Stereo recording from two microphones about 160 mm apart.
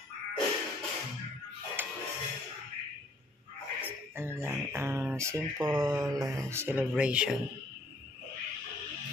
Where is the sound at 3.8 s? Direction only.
15° right (ahead or behind).